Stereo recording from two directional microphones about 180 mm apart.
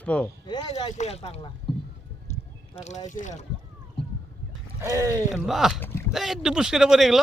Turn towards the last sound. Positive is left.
turn(degrees=0)  # may be behind; listen again after turning